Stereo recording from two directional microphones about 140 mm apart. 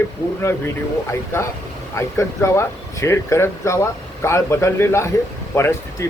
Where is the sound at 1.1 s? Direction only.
20° left (ahead or behind).